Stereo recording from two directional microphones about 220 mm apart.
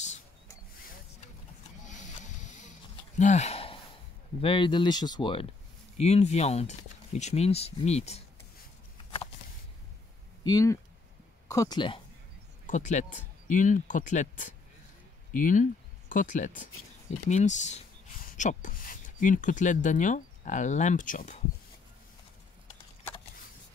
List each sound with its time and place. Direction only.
1.9 s a sound: 35° left (ahead or behind)
4.4 s speech: 25° left (ahead or behind)
10.4 s speech: 15° left (ahead or behind)
12.6 s speech: 35° left (ahead or behind)